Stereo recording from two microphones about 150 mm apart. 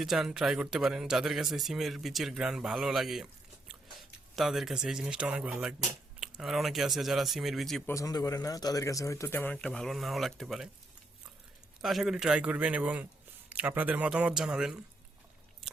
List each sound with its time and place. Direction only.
0.0 s speech: centre (ahead or behind)
7.9 s speech: 20° left (ahead or behind)
9.6 s speech: 5° left (ahead or behind)
11.8 s a man's voice: centre (ahead or behind)